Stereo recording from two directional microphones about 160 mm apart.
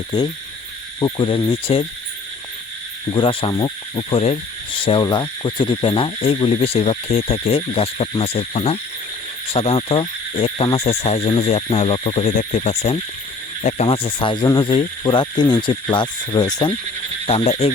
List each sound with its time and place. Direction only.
0.9 s speech: 25° left (ahead or behind)
1.5 s speech: 35° left (ahead or behind)
3.1 s speech: 30° left (ahead or behind)
3.5 s cricket: 25° left (ahead or behind)
4.1 s speech: 40° left (ahead or behind)
13.8 s speech: 35° left (ahead or behind)
17.2 s speech: 40° left (ahead or behind)